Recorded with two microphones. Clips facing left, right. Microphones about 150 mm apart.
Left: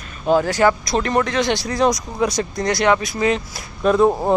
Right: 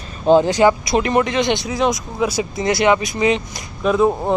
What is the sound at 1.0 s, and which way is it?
Speech, 5° right (ahead or behind).